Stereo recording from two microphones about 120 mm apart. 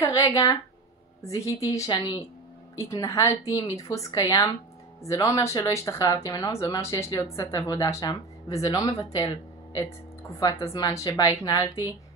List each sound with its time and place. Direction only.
0.0 s a woman's voice: 25° left (ahead or behind)
1.9 s a woman's voice: 35° left (ahead or behind)
2.8 s speech: 25° left (ahead or behind)
10.4 s speech: 25° left (ahead or behind)